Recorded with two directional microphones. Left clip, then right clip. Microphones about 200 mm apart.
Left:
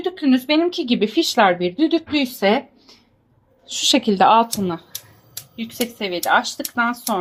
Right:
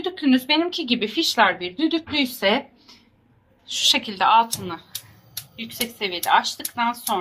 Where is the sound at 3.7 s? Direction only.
40° left (ahead or behind).